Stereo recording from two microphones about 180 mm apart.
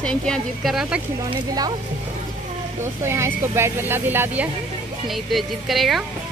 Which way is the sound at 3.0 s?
15° right (ahead or behind).